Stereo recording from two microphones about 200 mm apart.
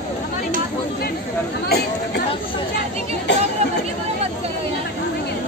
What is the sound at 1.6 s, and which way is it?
Chatter, 55° left (ahead or behind).